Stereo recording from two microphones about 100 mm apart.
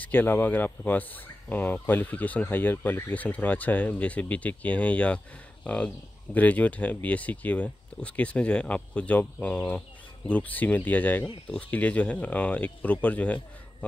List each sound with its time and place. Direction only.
0.0 s speech: 20° left (ahead or behind)